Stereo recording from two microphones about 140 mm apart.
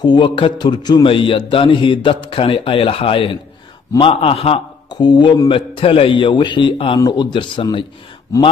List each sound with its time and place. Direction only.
0.0 s a man's voice: 35° left (ahead or behind)
4.9 s a man's voice: 30° left (ahead or behind)